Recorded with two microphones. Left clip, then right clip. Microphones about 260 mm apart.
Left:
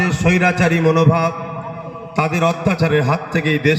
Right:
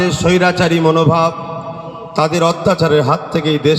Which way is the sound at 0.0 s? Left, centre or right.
Right.